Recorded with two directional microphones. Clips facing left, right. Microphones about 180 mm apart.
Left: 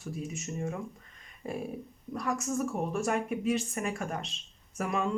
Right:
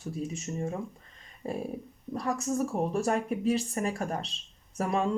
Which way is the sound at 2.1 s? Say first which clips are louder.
Right 2 dB; 30° right (ahead or behind).